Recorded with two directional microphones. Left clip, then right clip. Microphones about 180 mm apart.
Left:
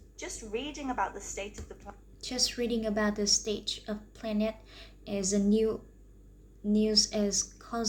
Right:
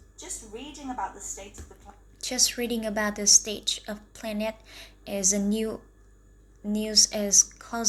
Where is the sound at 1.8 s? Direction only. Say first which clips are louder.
Right 8 dB; 10° left (ahead or behind).